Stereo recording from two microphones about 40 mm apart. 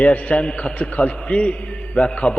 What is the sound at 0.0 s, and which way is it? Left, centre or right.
A man's voice, left.